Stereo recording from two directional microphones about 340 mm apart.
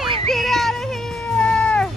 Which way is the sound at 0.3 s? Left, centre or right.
Centre.